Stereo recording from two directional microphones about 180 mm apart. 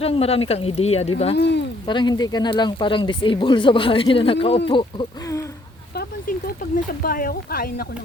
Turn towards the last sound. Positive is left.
turn(degrees=55)  # may be behind; listen again after turning